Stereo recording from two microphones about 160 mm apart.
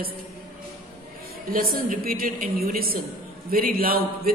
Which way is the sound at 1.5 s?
65° right (ahead or behind).